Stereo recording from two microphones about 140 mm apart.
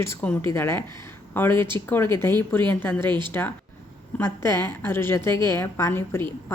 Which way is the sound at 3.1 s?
35° right (ahead or behind).